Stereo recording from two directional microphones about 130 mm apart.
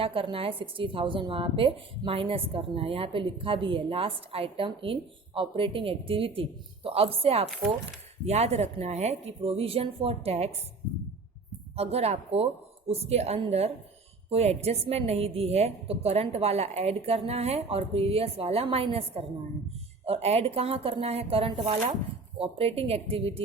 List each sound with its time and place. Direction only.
0.0 s a woman's voice: 45° right (ahead or behind)
11.8 s a woman's voice: 55° right (ahead or behind)